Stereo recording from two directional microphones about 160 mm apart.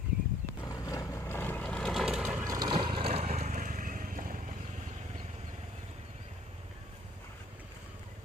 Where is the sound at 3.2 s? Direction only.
50° right (ahead or behind).